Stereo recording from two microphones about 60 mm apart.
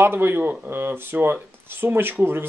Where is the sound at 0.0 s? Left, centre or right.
Right.